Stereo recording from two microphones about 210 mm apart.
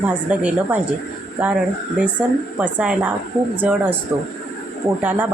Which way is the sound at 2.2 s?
5° right (ahead or behind).